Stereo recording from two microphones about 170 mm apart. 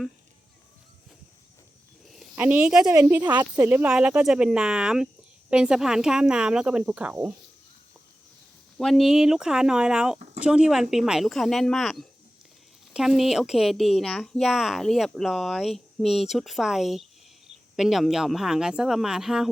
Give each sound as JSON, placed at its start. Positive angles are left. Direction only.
{"t": 2.3, "sound": "speech", "side_deg": -10}
{"t": 8.8, "sound": "speech", "side_deg": 0}
{"t": 10.2, "sound": "a sound", "side_deg": -45}
{"t": 10.4, "sound": "speech", "side_deg": -5}